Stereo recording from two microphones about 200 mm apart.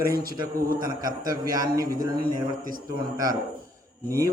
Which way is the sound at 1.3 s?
20° right (ahead or behind).